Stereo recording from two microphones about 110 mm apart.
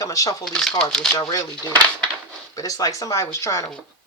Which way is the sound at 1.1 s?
30° left (ahead or behind).